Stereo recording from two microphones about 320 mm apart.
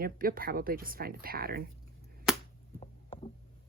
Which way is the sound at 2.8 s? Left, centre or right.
Centre.